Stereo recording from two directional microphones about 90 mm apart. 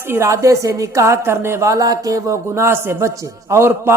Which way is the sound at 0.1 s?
35° right (ahead or behind).